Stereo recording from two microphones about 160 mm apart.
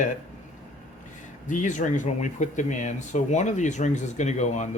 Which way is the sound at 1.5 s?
50° left (ahead or behind).